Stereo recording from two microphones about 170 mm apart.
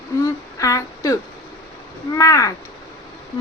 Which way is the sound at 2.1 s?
20° left (ahead or behind).